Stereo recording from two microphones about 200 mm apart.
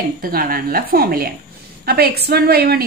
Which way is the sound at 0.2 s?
45° right (ahead or behind).